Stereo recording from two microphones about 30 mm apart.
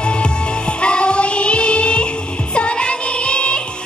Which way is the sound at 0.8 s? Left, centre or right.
Left.